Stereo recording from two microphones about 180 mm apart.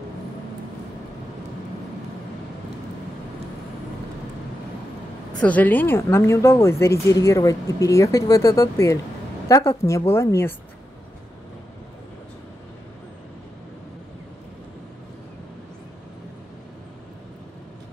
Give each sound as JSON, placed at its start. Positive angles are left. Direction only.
{"t": 5.4, "sound": "a woman's voice", "side_deg": 10}